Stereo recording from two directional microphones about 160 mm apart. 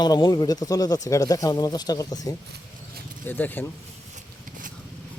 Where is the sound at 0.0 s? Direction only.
25° left (ahead or behind).